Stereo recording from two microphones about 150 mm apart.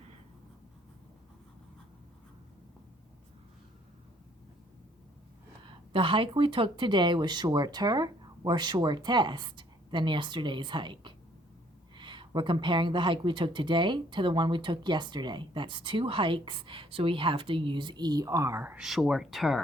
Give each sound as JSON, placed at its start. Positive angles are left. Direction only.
{"t": 5.6, "sound": "speech", "side_deg": -35}